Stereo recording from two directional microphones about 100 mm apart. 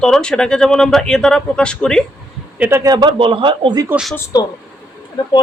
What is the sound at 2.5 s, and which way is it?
Speech, 15° right (ahead or behind).